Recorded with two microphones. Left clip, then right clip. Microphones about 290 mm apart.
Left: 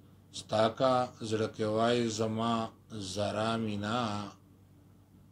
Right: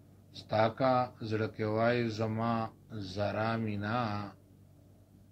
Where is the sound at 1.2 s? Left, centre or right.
Left.